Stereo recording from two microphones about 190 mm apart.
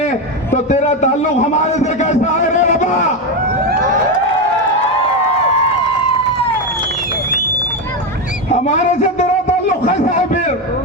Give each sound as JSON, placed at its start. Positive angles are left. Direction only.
{"t": 0.5, "sound": "a man's voice", "side_deg": 35}
{"t": 8.6, "sound": "a man's voice", "side_deg": 40}